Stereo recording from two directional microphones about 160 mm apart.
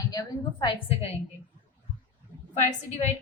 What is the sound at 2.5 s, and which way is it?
Speech, 45° left (ahead or behind).